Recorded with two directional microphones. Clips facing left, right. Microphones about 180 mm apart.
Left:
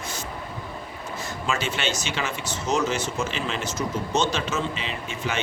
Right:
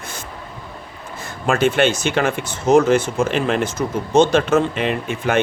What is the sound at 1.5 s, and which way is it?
Speech, 55° right (ahead or behind).